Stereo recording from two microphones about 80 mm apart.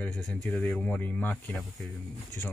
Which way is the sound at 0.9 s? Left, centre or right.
Centre.